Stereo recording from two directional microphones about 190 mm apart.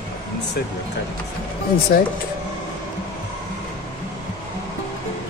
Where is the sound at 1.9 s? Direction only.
50° left (ahead or behind).